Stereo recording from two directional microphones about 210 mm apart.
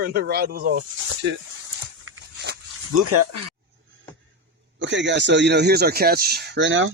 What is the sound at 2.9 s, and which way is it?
Speech, 90° right.